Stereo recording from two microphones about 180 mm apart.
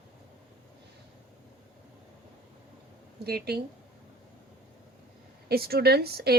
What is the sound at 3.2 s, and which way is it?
Speech, 60° right (ahead or behind).